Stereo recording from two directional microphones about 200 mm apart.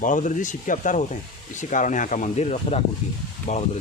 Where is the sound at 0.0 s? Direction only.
40° left (ahead or behind).